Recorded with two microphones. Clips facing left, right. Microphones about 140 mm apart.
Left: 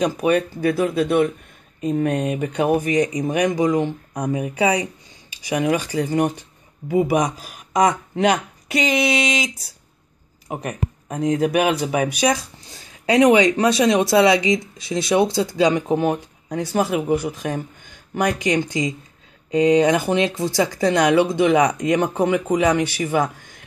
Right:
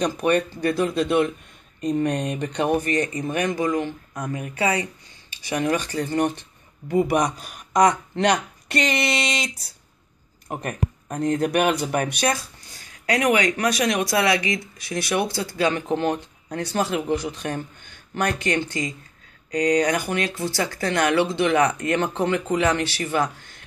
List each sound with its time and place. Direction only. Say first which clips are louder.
0.0 s speech: left 2 dB; 10° left (ahead or behind)